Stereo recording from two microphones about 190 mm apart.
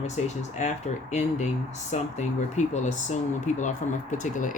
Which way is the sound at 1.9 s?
40° left (ahead or behind).